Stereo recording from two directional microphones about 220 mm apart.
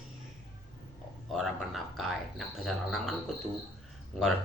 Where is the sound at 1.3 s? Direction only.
Centre (ahead or behind).